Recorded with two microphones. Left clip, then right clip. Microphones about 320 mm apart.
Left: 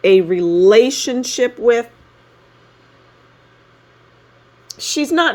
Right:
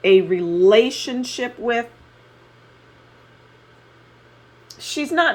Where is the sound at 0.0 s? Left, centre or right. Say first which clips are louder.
Left 3 dB; left.